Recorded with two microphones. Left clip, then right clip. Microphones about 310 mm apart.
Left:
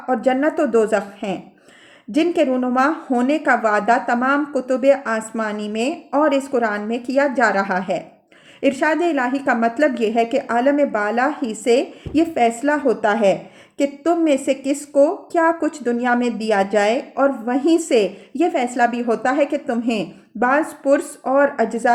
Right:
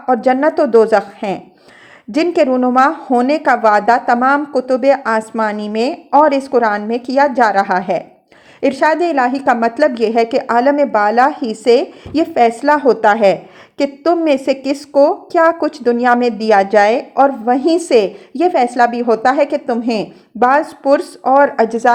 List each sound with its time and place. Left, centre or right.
0.1 s a woman's voice: centre